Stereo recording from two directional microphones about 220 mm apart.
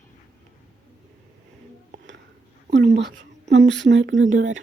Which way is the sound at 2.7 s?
50° right (ahead or behind).